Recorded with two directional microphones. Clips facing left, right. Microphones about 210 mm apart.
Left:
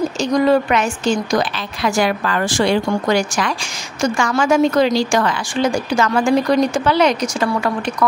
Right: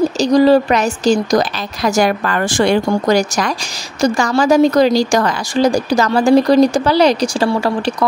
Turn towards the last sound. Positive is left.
turn(degrees=-30)  # may be behind; listen again after turning